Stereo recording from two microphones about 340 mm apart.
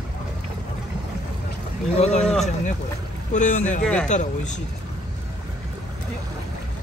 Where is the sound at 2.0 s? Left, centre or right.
Centre.